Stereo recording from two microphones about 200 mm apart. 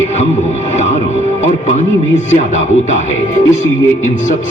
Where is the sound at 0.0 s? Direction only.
35° left (ahead or behind).